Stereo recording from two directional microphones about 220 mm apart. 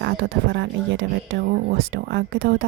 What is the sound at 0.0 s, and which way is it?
A woman's voice, 50° right (ahead or behind).